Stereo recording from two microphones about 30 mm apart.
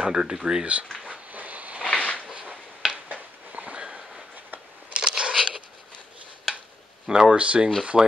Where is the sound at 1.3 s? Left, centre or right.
Right.